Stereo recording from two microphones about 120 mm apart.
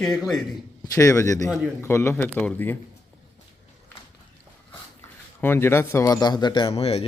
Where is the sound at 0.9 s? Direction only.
25° left (ahead or behind).